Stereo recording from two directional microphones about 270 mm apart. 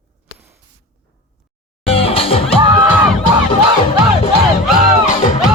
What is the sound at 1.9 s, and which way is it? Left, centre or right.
Music, left.